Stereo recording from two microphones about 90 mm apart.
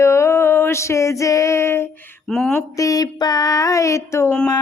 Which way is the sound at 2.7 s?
40° left (ahead or behind).